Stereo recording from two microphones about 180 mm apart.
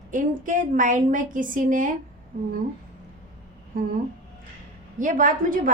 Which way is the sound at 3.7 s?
50° right (ahead or behind).